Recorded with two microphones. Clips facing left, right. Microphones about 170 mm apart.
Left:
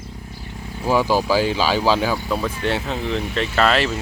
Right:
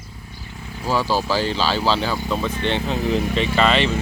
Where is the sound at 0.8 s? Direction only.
15° left (ahead or behind).